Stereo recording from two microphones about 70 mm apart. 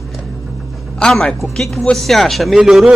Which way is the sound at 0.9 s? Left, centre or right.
Centre.